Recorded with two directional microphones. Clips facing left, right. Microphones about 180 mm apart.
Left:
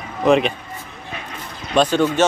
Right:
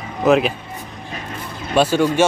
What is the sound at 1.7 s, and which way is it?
Speech, 10° right (ahead or behind).